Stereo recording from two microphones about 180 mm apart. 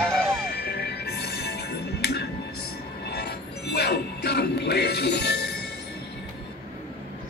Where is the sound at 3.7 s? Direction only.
65° left (ahead or behind).